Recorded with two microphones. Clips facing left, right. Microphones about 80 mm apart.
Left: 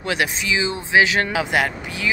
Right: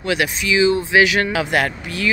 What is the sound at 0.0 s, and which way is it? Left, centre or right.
Speech, left.